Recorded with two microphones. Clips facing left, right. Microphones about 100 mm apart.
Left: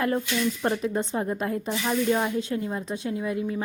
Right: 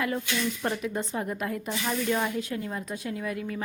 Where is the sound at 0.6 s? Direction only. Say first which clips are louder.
Left 4 dB; 30° left (ahead or behind).